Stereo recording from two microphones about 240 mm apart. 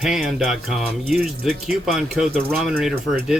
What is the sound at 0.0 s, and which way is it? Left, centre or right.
Speech, centre.